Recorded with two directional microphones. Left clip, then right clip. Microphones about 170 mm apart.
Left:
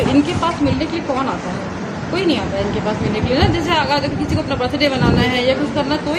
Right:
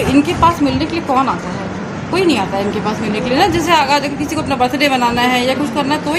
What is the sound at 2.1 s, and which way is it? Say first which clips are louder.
A woman's voice: right 4 dB; 45° right (ahead or behind).